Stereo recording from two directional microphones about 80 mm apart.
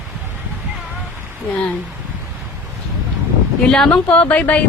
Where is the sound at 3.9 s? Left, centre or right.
Centre.